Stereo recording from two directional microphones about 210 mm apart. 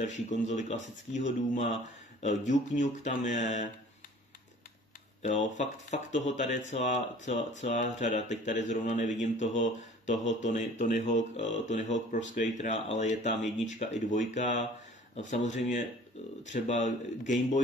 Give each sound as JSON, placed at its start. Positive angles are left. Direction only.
{"t": 0.0, "sound": "speech", "side_deg": 35}
{"t": 5.2, "sound": "speech", "side_deg": 35}